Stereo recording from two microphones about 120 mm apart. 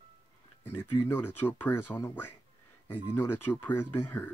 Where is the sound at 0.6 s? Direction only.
15° left (ahead or behind).